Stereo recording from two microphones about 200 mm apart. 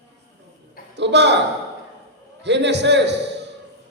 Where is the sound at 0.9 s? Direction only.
60° right (ahead or behind).